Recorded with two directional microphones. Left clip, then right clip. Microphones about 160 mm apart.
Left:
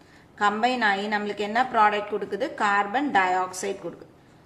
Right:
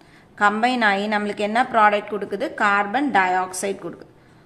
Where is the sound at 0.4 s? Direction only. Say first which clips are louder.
Right 4 dB; 25° right (ahead or behind).